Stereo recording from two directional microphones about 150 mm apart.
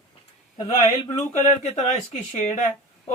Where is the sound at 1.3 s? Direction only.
50° left (ahead or behind).